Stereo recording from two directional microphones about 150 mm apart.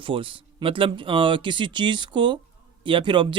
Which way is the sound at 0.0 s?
35° right (ahead or behind).